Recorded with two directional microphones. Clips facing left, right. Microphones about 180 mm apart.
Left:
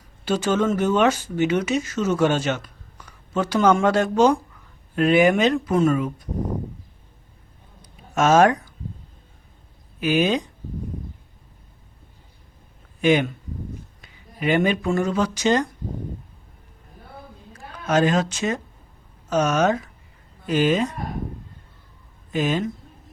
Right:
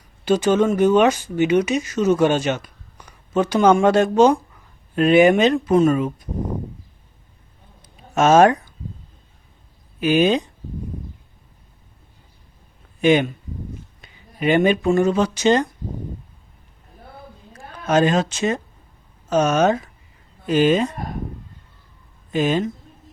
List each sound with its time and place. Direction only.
0.3 s speech: 15° right (ahead or behind)
7.8 s a sound: 25° right (ahead or behind)
10.0 s speech: 25° right (ahead or behind)
13.0 s speech: 25° right (ahead or behind)
17.8 s speech: 25° right (ahead or behind)
22.3 s speech: 30° right (ahead or behind)